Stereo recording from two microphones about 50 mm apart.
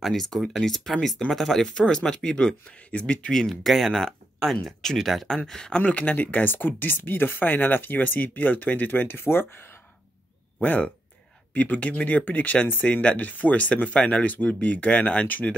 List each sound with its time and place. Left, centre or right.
0.0 s speech: centre
1.7 s speech: centre
2.9 s speech: left
3.3 s speech: centre
5.3 s speech: centre
5.8 s speech: left
10.6 s speech: left